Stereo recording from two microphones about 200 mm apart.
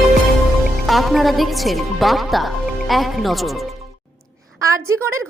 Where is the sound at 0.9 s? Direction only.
Centre (ahead or behind).